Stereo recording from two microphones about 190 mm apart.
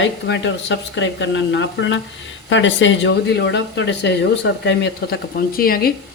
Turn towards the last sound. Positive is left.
turn(degrees=50)  # may be behind; listen again after turning